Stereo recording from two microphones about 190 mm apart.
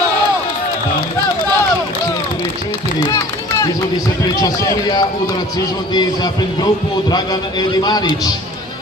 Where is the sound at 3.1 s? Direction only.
15° left (ahead or behind).